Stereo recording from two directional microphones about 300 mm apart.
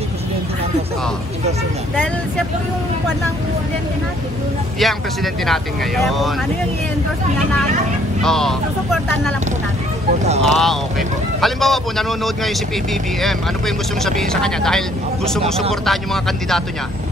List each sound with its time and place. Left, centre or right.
4.7 s speech: centre
8.2 s speech: centre
10.4 s speech: centre